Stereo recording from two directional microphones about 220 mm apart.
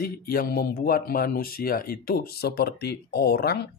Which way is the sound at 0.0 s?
40° left (ahead or behind).